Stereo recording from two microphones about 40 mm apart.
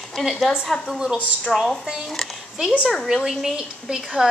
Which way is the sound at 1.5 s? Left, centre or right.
Centre.